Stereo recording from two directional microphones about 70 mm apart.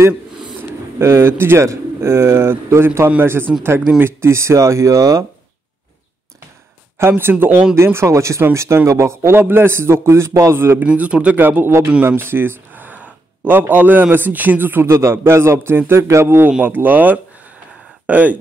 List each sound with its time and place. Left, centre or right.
0.9 s a man's voice: right
3.5 s speech: centre
4.0 s speech: right
7.0 s a man's voice: right
7.7 s a man's voice: right
10.8 s speech: centre
12.2 s a sound: right
14.1 s speech: right
14.9 s a man's voice: right
16.6 s speech: right